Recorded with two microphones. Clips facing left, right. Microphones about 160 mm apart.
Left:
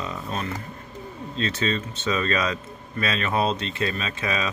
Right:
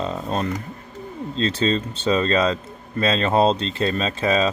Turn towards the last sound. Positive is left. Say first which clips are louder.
# right 7 dB
turn(degrees=-30)  # may be behind; listen again after turning